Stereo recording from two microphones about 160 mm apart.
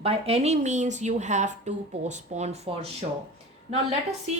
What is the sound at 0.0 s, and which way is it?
Speech, 40° right (ahead or behind).